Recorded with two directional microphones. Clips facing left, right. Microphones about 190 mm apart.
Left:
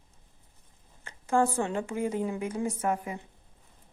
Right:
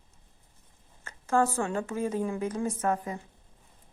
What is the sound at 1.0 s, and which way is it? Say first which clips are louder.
A woman's voice: even; 15° left (ahead or behind).